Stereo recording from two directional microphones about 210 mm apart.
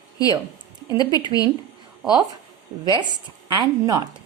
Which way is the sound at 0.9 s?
20° left (ahead or behind).